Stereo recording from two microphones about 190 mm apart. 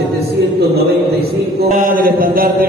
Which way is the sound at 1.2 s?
50° right (ahead or behind).